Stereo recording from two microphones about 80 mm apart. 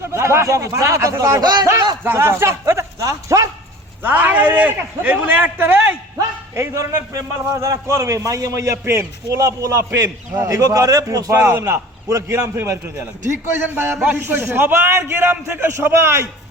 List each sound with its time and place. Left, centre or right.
0.1 s a man's voice: right
1.4 s speech: right
2.1 s speech: right
4.0 s a man's voice: right
6.1 s a man's voice: right